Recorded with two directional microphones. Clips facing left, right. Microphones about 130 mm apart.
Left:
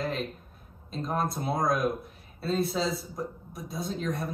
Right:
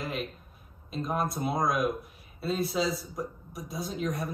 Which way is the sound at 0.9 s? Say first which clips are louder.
Even; centre (ahead or behind).